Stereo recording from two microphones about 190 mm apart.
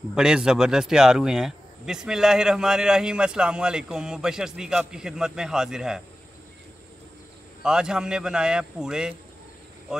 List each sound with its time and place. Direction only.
0.1 s speech: 5° right (ahead or behind)
7.6 s speech: 5° right (ahead or behind)